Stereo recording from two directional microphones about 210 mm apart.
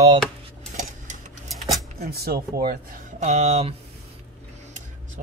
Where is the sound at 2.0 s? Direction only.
50° right (ahead or behind); by 3.7 s 30° right (ahead or behind).